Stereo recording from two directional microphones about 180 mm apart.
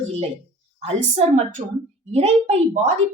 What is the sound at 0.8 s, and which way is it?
A woman's voice, 35° right (ahead or behind).